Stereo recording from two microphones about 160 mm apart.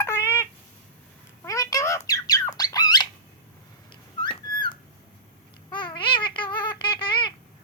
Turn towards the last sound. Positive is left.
turn(degrees=30)  # may be behind; listen again after turning